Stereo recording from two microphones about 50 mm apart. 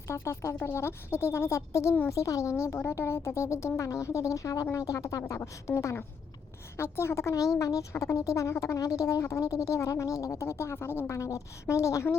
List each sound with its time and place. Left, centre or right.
0.1 s speech: left
2.0 s speech: left
3.8 s speech: left
6.7 s a woman's voice: left
7.5 s speech: left
11.1 s speech: left